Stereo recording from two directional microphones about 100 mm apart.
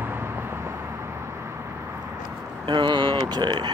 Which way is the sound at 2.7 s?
50° right (ahead or behind).